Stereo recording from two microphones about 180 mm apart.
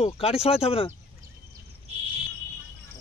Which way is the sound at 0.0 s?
35° left (ahead or behind).